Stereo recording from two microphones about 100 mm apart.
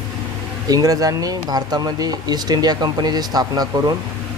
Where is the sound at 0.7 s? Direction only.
35° right (ahead or behind).